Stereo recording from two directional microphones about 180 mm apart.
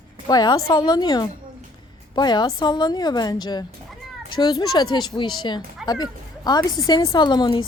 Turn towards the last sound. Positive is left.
turn(degrees=25)  # may be behind; listen again after turning